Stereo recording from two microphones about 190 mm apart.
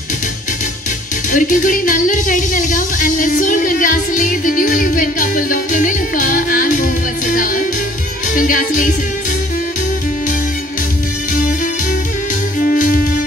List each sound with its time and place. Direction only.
1.3 s speech: 45° left (ahead or behind)
12.5 s music: 45° left (ahead or behind)